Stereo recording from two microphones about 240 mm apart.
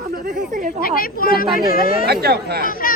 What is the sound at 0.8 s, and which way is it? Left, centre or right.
A child's voice, left.